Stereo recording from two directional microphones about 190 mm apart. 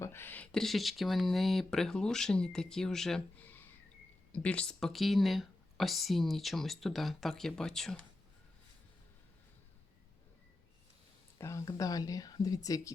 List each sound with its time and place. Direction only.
0.0 s speech: 10° left (ahead or behind)
11.3 s speech: 15° left (ahead or behind)